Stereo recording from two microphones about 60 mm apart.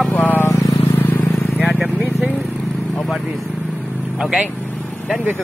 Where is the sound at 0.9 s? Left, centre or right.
Left.